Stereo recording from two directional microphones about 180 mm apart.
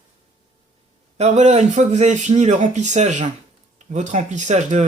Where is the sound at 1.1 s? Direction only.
40° right (ahead or behind).